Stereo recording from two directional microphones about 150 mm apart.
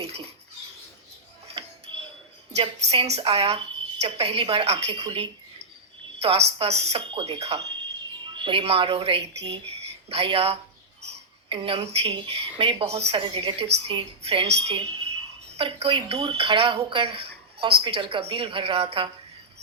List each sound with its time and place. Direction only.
2.6 s a woman's voice: 40° right (ahead or behind)